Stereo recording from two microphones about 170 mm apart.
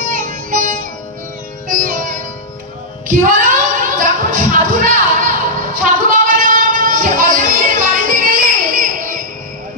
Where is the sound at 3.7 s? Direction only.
50° right (ahead or behind).